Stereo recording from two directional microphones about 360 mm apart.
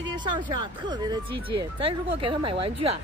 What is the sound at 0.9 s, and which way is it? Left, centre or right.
Speech, centre.